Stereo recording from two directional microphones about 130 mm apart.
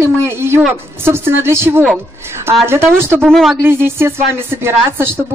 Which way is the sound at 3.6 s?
20° right (ahead or behind).